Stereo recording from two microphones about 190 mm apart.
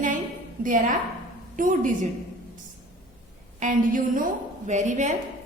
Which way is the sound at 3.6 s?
40° right (ahead or behind).